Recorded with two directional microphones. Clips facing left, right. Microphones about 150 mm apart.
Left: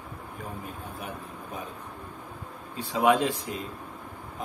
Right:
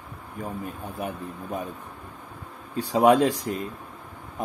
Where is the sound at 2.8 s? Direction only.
40° right (ahead or behind).